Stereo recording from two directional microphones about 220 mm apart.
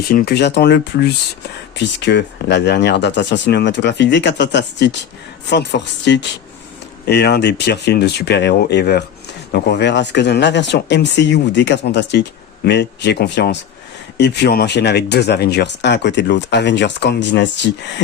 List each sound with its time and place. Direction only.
0.1 s speech: 45° left (ahead or behind)